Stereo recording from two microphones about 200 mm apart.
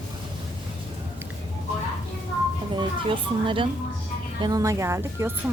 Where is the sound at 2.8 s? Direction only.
25° right (ahead or behind).